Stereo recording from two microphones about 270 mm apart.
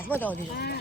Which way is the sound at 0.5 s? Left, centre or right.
Left.